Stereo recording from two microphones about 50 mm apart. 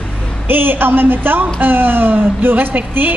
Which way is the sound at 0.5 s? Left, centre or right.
Right.